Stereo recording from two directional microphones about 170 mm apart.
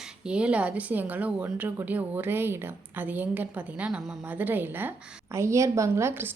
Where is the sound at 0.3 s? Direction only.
5° right (ahead or behind).